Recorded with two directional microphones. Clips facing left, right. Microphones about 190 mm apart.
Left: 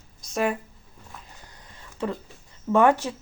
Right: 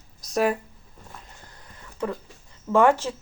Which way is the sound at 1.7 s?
20° left (ahead or behind).